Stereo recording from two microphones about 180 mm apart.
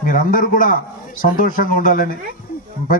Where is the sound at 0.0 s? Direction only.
50° left (ahead or behind).